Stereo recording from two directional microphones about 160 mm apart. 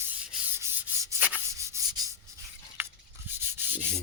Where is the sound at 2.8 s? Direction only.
15° right (ahead or behind).